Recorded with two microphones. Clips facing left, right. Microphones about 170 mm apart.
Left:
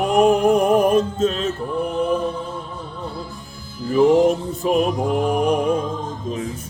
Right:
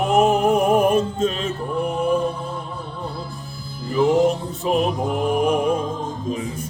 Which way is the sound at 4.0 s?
Centre (ahead or behind).